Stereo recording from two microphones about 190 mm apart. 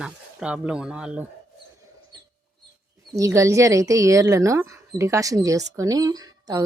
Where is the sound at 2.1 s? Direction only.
20° right (ahead or behind).